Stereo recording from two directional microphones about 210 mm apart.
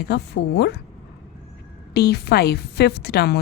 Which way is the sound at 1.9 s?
50° left (ahead or behind).